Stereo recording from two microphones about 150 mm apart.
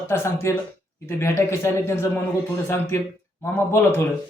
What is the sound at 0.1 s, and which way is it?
Speech, 20° left (ahead or behind).